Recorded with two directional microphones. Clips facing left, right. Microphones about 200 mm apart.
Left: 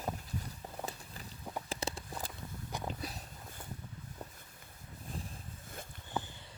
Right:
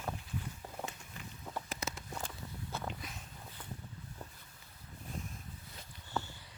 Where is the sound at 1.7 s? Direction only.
30° left (ahead or behind).